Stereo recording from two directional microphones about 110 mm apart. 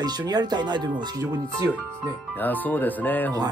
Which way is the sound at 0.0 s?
40° right (ahead or behind).